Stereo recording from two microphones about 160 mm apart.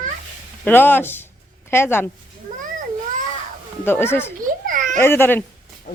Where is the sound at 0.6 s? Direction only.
10° left (ahead or behind).